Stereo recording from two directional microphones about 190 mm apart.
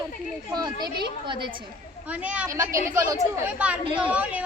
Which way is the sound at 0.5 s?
20° right (ahead or behind).